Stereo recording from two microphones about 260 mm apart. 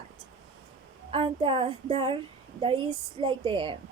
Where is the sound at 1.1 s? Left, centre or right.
Centre.